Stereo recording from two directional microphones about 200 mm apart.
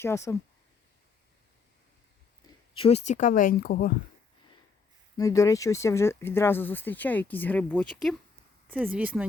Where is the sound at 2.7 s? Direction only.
30° left (ahead or behind); by 3.9 s 50° left (ahead or behind).